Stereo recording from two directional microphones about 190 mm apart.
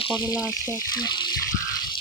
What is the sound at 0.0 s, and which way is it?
Speech, 25° left (ahead or behind).